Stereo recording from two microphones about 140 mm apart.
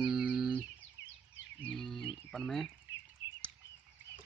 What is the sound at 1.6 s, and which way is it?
Speech, 5° left (ahead or behind).